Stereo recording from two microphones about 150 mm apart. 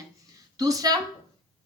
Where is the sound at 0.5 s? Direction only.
25° right (ahead or behind).